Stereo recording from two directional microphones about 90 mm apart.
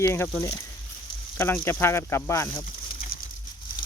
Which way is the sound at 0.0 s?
25° left (ahead or behind).